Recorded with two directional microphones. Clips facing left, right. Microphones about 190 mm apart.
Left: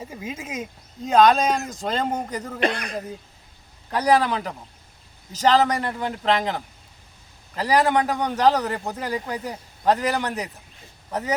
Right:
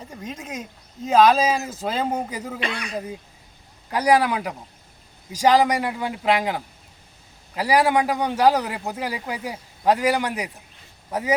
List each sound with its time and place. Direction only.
0.0 s speech: 5° left (ahead or behind)
2.6 s speech: 50° left (ahead or behind)
3.8 s a man's voice: 10° right (ahead or behind)